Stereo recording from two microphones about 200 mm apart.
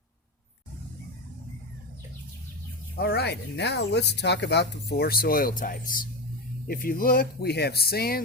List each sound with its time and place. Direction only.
2.9 s speech: 50° left (ahead or behind)